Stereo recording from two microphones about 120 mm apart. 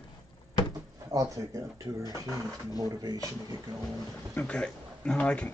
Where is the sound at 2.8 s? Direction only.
35° right (ahead or behind).